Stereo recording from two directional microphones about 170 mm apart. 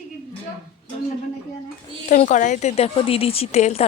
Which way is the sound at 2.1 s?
45° left (ahead or behind).